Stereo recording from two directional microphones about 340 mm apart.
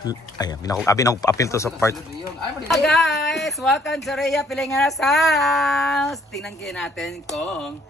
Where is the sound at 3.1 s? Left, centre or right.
Left.